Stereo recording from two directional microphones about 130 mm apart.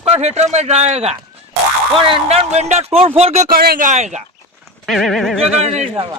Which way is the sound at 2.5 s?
60° right (ahead or behind).